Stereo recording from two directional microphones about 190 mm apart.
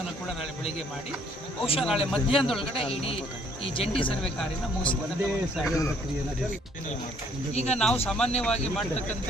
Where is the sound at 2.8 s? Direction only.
30° left (ahead or behind).